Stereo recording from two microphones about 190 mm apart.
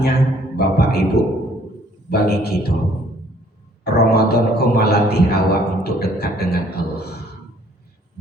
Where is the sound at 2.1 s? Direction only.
55° left (ahead or behind).